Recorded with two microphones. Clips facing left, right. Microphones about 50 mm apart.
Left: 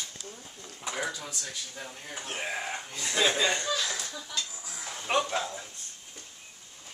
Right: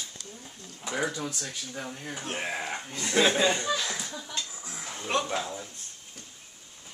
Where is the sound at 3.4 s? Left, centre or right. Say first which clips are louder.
Right 2 dB; right.